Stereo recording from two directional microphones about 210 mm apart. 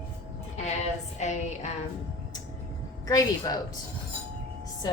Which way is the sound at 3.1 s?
20° left (ahead or behind).